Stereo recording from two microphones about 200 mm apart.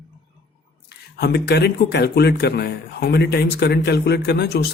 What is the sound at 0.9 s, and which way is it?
Speech, 55° left (ahead or behind).